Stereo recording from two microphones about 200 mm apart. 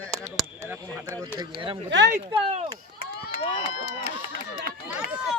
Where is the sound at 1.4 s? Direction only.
25° right (ahead or behind).